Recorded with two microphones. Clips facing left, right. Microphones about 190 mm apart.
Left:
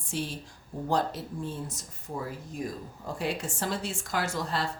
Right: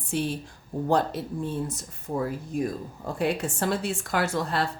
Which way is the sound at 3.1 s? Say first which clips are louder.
Right 6 dB; 60° right (ahead or behind).